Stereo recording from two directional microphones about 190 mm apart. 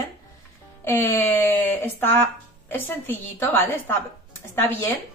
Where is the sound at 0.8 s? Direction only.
10° left (ahead or behind).